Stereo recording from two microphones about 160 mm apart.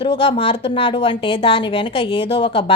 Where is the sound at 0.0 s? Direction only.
35° left (ahead or behind).